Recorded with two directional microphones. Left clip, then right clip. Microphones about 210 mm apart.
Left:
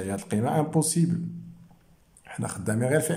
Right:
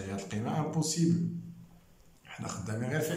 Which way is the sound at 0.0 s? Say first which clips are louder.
Left 9 dB; 35° left (ahead or behind).